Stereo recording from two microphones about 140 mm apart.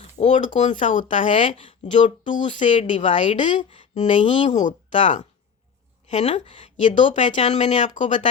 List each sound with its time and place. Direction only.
0.0 s speech: 55° left (ahead or behind)
1.5 s speech: 40° left (ahead or behind)
1.9 s speech: 60° left (ahead or behind)
3.6 s speech: 40° left (ahead or behind)
3.9 s speech: 60° left (ahead or behind)